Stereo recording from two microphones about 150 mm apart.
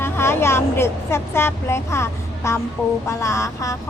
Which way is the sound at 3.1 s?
20° left (ahead or behind).